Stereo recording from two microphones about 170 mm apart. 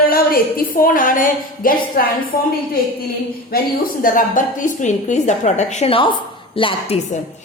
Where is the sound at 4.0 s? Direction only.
50° left (ahead or behind); by 7.0 s 30° left (ahead or behind).